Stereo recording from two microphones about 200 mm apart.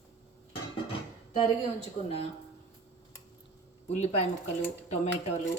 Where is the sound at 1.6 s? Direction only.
30° left (ahead or behind).